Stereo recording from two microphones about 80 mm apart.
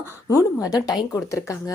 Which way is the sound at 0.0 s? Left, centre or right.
Left.